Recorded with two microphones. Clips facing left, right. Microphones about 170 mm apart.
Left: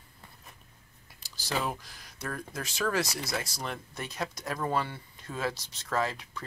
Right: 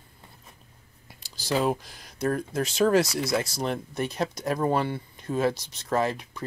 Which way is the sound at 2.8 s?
40° right (ahead or behind).